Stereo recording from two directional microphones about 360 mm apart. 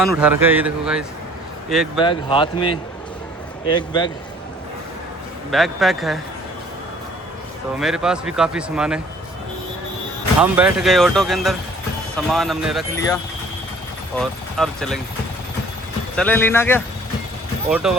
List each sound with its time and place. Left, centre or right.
0.0 s a man's voice: centre
2.0 s speech: centre
5.5 s a man's voice: centre
7.8 s a man's voice: centre
10.4 s a man's voice: centre
14.2 s a man's voice: centre
16.1 s a man's voice: centre